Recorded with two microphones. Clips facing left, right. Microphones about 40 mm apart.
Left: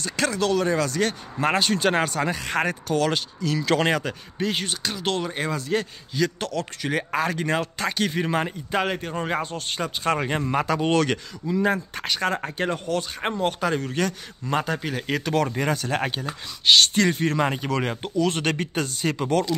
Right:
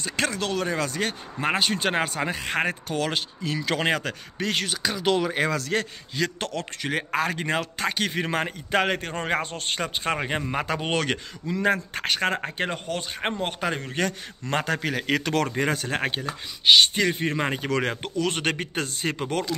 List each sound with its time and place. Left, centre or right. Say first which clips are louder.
0.0 s a man's voice: left 3 dB; right
1.4 s speech: left 3 dB; centre
2.3 s speech: left 1 dB; right
3.6 s speech: left 3 dB; centre
4.0 s speech: left 2 dB; right
5.7 s a man's voice: left 1 dB; right
10.1 s speech: left 2 dB; centre
10.6 s a man's voice: left 7 dB; right
11.4 s a man's voice: left 1 dB; right
14.4 s speech: left 1 dB; right
15.4 s speech: left 1 dB; right
17.6 s a man's voice: even; right
18.3 s a man's voice: left 2 dB; right